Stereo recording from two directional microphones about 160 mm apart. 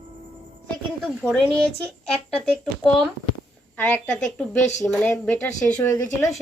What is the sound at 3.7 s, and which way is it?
A woman's voice, 10° left (ahead or behind).